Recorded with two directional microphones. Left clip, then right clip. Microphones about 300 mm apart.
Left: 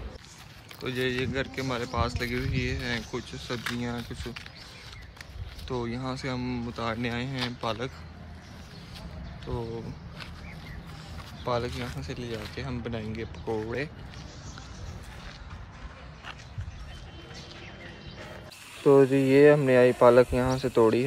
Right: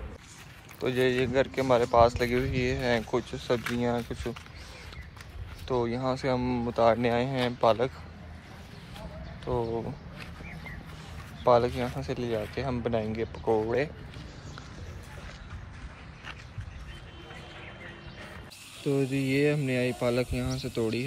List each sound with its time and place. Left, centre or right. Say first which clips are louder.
0.7 s speech: right 4 dB; centre
5.7 s speech: right 5 dB; centre
9.4 s speech: right 6 dB; centre
11.4 s speech: right 7 dB; centre
18.8 s speech: left 9 dB; centre